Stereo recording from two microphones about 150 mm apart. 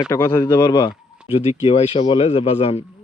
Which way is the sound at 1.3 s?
45° left (ahead or behind).